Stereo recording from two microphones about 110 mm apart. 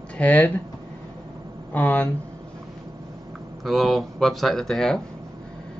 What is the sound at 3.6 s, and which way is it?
Speech, centre (ahead or behind).